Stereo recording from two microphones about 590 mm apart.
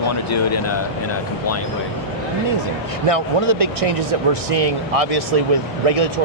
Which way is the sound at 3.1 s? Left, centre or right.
Right.